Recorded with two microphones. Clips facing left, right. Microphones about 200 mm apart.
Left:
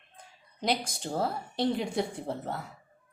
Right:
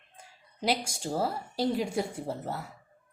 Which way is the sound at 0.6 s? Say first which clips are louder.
Right 1 dB; 10° right (ahead or behind).